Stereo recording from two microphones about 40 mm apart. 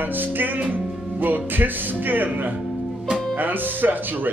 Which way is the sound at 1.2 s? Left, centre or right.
Right.